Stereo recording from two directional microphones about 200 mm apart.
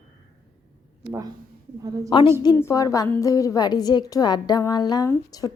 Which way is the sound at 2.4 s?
15° left (ahead or behind).